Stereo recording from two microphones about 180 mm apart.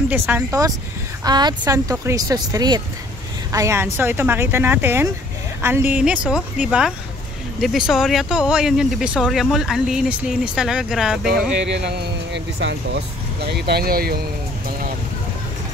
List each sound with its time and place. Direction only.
0.1 s speech: 10° right (ahead or behind)
11.7 s speech: 75° right (ahead or behind); by 14.2 s 55° right (ahead or behind)